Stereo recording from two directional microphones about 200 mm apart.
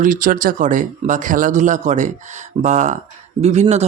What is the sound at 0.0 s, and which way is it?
Speech, 40° right (ahead or behind).